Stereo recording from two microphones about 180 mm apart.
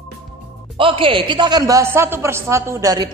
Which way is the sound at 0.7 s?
30° right (ahead or behind).